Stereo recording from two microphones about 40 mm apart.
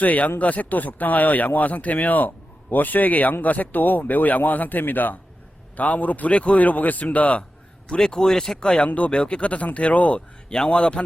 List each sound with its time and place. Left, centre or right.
0.0 s speech: left
5.7 s a man's voice: left
7.9 s a man's voice: centre